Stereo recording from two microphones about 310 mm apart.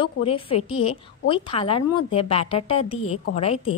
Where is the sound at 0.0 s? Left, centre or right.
Centre.